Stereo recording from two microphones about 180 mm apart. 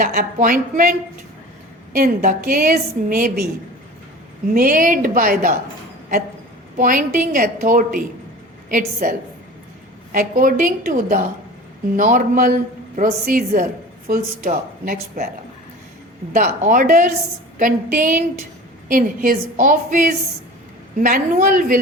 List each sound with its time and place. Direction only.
0.0 s a woman's voice: 55° right (ahead or behind)
4.5 s a woman's voice: 50° right (ahead or behind)
6.7 s a woman's voice: 50° right (ahead or behind)
16.3 s a woman's voice: 45° right (ahead or behind)
21.0 s a woman's voice: 50° right (ahead or behind)